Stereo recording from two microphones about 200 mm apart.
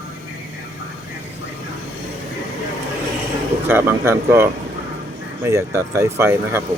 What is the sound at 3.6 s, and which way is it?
Speech, 10° right (ahead or behind).